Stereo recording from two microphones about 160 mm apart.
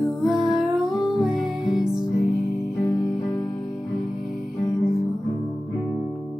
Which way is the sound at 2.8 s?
20° left (ahead or behind).